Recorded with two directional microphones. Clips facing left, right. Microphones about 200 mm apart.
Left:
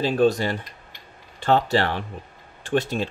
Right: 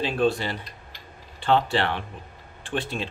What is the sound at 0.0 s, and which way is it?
Speech, 40° left (ahead or behind).